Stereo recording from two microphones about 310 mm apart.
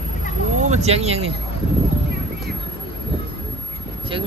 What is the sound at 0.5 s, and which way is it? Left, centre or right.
Speech, right.